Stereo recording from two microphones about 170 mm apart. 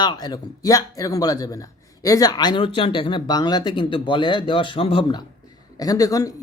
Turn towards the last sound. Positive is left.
turn(degrees=20)  # may be behind; listen again after turning